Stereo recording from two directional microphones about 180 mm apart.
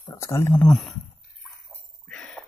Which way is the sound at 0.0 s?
20° left (ahead or behind).